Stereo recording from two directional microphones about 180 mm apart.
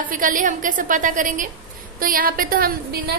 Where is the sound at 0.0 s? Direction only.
50° right (ahead or behind).